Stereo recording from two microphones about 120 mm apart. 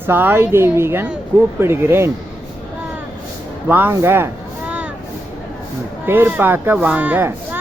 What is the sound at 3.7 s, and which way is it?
Speech, 15° right (ahead or behind).